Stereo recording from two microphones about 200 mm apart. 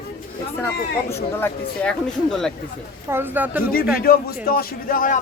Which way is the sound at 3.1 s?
10° right (ahead or behind).